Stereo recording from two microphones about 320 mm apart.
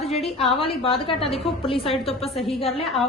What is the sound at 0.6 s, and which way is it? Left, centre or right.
A woman's voice, centre.